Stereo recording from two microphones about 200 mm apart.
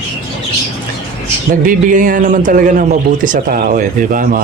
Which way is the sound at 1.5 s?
40° right (ahead or behind).